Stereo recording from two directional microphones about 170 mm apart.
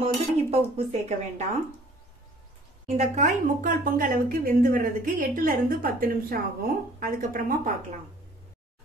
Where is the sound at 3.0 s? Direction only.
45° right (ahead or behind).